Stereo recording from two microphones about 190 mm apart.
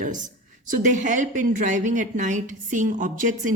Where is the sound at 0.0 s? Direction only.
40° right (ahead or behind).